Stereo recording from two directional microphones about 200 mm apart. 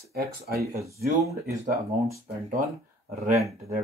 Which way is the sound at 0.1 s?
50° right (ahead or behind).